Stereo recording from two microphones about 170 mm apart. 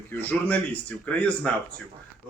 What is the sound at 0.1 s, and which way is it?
A man's voice, 10° left (ahead or behind).